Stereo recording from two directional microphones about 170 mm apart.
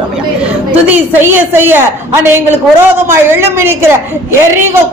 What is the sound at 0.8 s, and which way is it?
Speech, 15° right (ahead or behind).